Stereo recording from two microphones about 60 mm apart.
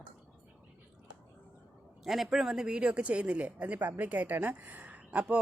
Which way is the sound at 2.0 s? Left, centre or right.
Centre.